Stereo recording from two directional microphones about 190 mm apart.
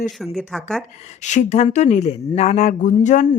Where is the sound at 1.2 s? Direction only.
40° left (ahead or behind).